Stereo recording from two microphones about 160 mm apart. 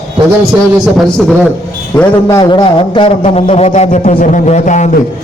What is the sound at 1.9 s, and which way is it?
A man's voice, 25° left (ahead or behind).